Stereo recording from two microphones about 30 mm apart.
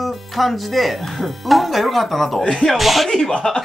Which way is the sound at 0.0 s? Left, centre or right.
Centre.